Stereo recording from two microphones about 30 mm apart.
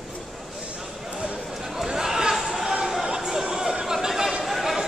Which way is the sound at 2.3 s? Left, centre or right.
Centre.